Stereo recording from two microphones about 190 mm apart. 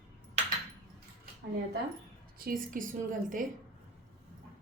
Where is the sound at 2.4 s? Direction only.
45° right (ahead or behind).